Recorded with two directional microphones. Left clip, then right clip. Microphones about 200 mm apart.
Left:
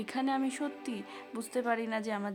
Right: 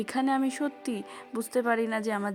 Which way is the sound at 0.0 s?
25° right (ahead or behind).